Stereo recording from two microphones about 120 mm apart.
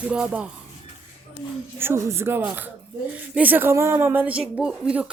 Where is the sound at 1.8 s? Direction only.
20° right (ahead or behind).